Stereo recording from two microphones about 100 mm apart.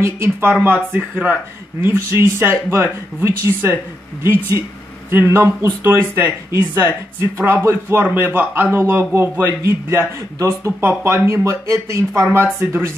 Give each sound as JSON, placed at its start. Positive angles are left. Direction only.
{"t": 0.0, "sound": "a man's voice", "side_deg": -25}
{"t": 5.1, "sound": "a man's voice", "side_deg": -25}